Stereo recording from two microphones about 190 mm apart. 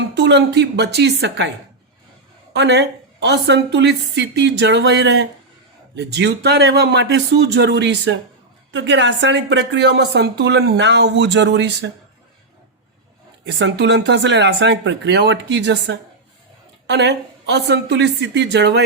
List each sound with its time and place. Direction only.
0.1 s a woman's voice: 65° right (ahead or behind)
2.5 s a woman's voice: 65° right (ahead or behind)
13.5 s a woman's voice: 65° right (ahead or behind)